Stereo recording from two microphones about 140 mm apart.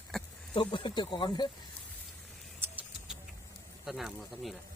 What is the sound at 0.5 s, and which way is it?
Speech, 35° left (ahead or behind).